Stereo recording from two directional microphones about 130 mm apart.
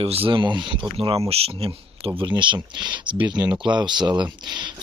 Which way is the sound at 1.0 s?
45° right (ahead or behind).